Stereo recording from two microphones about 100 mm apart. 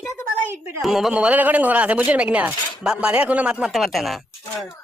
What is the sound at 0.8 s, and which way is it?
Speech, 5° right (ahead or behind).